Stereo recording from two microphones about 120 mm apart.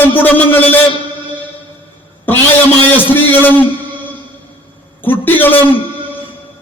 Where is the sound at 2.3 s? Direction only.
15° left (ahead or behind).